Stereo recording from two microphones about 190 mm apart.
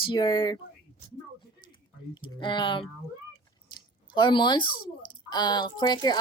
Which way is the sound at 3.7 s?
25° left (ahead or behind).